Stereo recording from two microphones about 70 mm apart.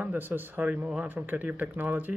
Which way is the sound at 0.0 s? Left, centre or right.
Right.